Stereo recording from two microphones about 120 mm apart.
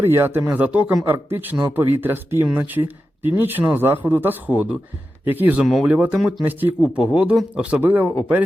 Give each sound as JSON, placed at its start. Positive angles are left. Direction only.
{"t": 0.0, "sound": "speech", "side_deg": -20}
{"t": 5.6, "sound": "speech", "side_deg": -5}